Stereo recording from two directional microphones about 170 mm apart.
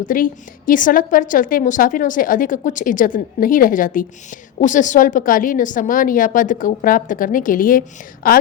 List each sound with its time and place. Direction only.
0.0 s a woman's voice: 55° left (ahead or behind)